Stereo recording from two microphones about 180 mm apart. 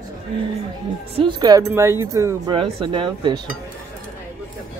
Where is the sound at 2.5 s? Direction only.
30° right (ahead or behind).